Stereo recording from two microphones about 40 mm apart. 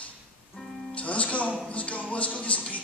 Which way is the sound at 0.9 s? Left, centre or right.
Left.